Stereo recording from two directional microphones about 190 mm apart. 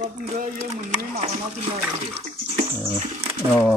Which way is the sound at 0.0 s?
40° right (ahead or behind).